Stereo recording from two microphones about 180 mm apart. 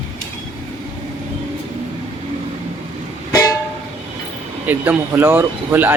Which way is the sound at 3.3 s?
15° left (ahead or behind).